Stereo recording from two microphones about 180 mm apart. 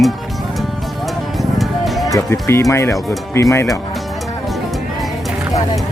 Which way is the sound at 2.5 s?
15° left (ahead or behind).